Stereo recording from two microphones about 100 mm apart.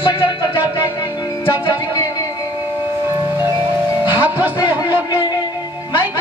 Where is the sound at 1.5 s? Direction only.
45° left (ahead or behind).